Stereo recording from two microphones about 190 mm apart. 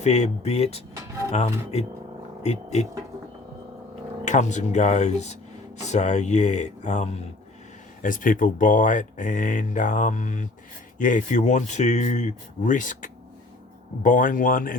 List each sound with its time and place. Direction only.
0.0 s speech: 35° left (ahead or behind)
4.3 s speech: 40° left (ahead or behind)